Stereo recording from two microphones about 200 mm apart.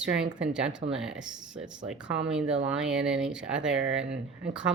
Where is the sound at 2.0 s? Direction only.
65° right (ahead or behind).